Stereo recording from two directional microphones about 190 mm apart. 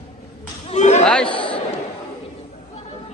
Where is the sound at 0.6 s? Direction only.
35° left (ahead or behind).